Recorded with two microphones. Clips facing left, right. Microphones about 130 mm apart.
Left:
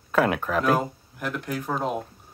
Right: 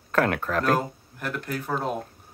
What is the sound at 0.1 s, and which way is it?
Speech, 10° left (ahead or behind).